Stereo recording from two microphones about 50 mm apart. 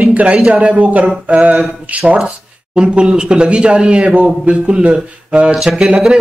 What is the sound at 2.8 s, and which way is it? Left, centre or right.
A man's voice, centre.